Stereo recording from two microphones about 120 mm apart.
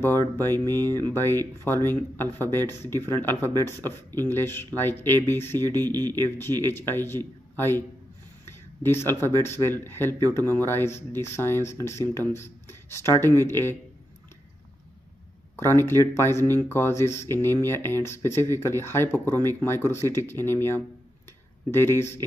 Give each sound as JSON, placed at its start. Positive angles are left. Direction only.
{"t": 0.4, "sound": "speech", "side_deg": 20}
{"t": 15.5, "sound": "speech", "side_deg": 20}